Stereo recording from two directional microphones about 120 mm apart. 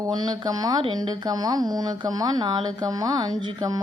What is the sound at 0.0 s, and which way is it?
A woman's voice, 35° right (ahead or behind).